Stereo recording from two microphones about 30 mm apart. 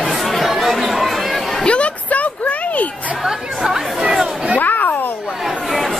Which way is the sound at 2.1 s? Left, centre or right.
Left.